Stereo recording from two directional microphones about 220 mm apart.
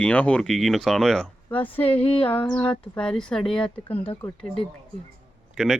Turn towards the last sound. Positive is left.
turn(degrees=0)  # may be behind; listen again after turning